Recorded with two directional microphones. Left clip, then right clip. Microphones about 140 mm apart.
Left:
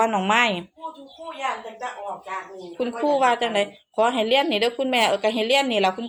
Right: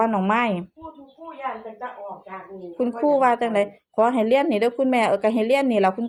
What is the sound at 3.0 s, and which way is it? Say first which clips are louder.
A woman's voice: right 1 dB; 35° right (ahead or behind).